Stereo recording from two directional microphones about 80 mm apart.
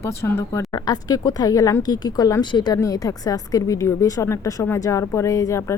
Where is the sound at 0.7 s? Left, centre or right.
Left.